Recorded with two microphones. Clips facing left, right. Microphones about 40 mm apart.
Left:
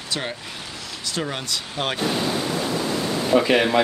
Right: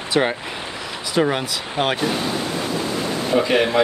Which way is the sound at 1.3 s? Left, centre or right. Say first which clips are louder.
Right 5 dB; centre.